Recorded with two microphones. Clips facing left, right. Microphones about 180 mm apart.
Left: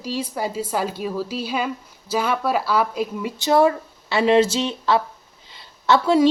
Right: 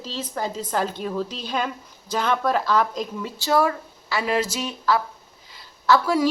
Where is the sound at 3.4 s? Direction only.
25° left (ahead or behind).